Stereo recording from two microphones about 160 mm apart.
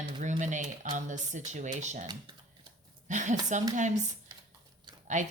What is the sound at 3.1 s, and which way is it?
Speech, 50° right (ahead or behind).